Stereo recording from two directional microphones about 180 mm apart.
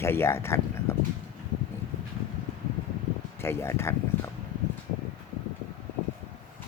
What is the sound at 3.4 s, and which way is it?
Speech, 15° left (ahead or behind).